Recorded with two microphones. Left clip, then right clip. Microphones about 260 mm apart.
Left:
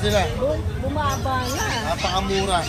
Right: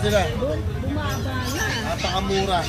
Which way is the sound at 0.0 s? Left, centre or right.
Centre.